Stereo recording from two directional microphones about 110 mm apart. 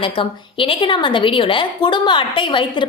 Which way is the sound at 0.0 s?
50° left (ahead or behind).